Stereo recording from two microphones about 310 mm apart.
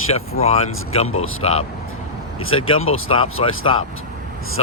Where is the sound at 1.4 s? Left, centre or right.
Centre.